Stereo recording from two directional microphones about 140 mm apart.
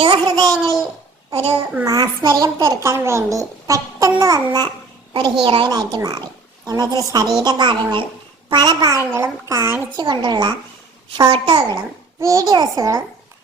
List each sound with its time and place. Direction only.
0.0 s a sound: 40° right (ahead or behind)
1.3 s a child's voice: 45° right (ahead or behind)
1.8 s a child's voice: 25° right (ahead or behind)
5.1 s speech: 35° right (ahead or behind)
5.7 s a child's voice: 25° right (ahead or behind)
10.0 s speech: 30° right (ahead or behind)
12.2 s a child's voice: 25° right (ahead or behind)